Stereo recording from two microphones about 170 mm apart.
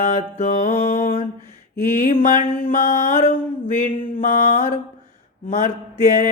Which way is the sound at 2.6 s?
55° left (ahead or behind).